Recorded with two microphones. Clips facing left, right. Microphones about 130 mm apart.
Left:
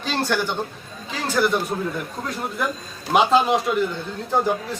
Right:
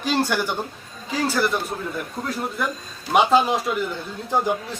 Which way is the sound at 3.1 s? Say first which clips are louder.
Even; centre (ahead or behind).